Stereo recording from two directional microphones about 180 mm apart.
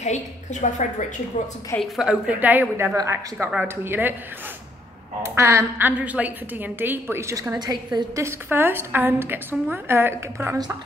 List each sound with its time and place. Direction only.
0.0 s a woman's voice: 40° left (ahead or behind)
1.8 s a woman's voice: 5° right (ahead or behind)
5.2 s a woman's voice: 15° right (ahead or behind)